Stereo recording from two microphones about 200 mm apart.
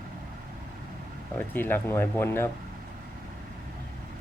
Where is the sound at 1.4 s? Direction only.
10° left (ahead or behind).